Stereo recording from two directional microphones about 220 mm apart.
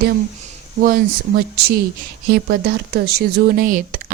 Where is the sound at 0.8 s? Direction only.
40° right (ahead or behind).